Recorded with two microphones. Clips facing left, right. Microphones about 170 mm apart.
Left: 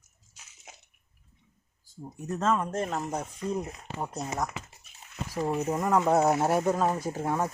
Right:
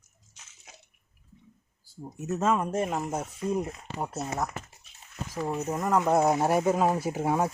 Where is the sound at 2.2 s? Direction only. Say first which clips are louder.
Right 1 dB; 10° right (ahead or behind).